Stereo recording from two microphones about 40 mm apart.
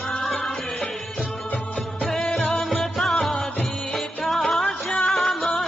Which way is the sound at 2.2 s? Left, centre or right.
Left.